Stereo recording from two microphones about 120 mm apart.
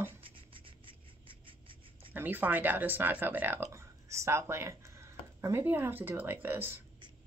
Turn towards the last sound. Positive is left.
turn(degrees=-15)  # may be behind; listen again after turning